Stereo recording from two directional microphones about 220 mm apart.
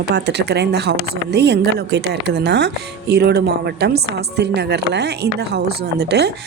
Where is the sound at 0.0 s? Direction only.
50° right (ahead or behind).